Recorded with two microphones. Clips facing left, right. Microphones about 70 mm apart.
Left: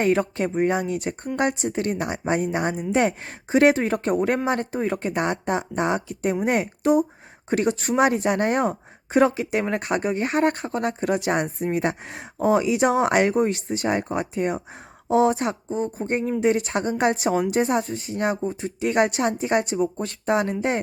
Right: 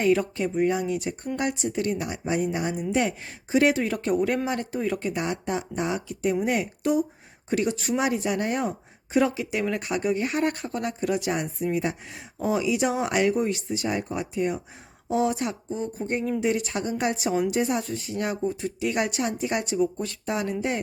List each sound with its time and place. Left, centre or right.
0.0 s a woman's voice: left